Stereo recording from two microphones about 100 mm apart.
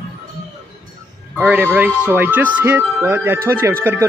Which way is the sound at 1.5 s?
15° right (ahead or behind).